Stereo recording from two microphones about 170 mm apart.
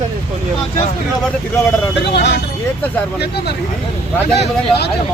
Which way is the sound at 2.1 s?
85° left.